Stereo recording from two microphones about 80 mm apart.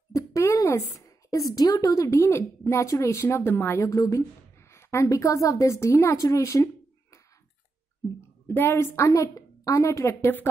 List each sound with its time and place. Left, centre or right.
0.1 s a woman's voice: left
8.5 s a woman's voice: left